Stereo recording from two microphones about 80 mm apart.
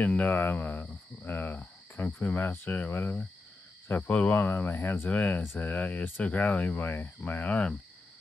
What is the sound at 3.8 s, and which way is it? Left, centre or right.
Speech, left.